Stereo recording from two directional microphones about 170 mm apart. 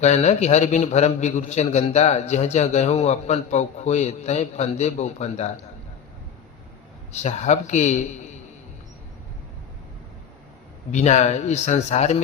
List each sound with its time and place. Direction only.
0.0 s a man's voice: 40° left (ahead or behind)
7.1 s speech: 40° left (ahead or behind)
10.9 s speech: 45° left (ahead or behind)